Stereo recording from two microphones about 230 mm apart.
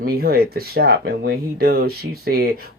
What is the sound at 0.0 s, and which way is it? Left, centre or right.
Speech, right.